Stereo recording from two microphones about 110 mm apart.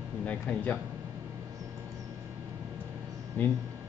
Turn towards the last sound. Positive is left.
turn(degrees=15)  # may be behind; listen again after turning